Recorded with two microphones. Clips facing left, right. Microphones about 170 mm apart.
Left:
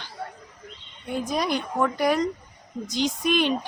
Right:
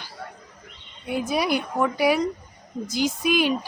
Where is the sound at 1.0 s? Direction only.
10° right (ahead or behind).